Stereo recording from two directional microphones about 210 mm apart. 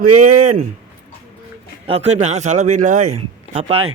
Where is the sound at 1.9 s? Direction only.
30° right (ahead or behind).